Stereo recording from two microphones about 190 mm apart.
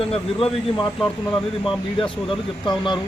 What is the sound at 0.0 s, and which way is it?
Speech, 30° left (ahead or behind).